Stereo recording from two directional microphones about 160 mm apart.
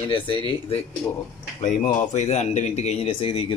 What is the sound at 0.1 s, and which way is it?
Speech, 35° left (ahead or behind).